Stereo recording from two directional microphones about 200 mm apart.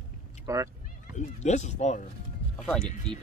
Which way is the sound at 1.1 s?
35° left (ahead or behind).